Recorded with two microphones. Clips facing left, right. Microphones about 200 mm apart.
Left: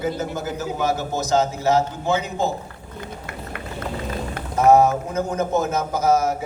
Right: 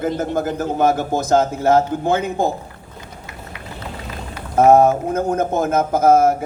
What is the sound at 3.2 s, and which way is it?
Run, 55° left (ahead or behind).